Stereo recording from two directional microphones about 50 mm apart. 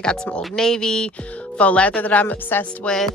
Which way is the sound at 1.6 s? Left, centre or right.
Left.